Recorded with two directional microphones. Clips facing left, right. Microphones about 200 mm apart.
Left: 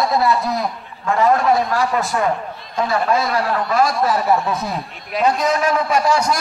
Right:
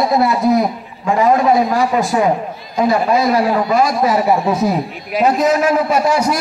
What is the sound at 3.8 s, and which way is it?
Speech, 20° right (ahead or behind).